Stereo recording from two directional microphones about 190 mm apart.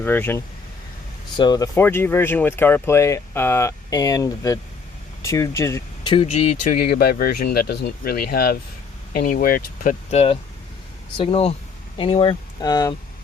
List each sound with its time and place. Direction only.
0.0 s speech: 10° left (ahead or behind)
6.1 s speech: 30° left (ahead or behind)
6.8 s speech: 55° left (ahead or behind)
10.1 s speech: 35° left (ahead or behind)